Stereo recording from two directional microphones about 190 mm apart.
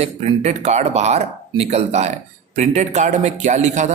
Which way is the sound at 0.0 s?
35° right (ahead or behind).